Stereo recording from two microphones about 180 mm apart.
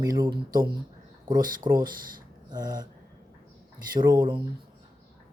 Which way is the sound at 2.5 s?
20° right (ahead or behind).